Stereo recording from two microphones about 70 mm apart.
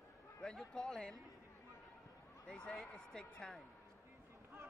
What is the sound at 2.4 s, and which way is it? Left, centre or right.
Speech, centre.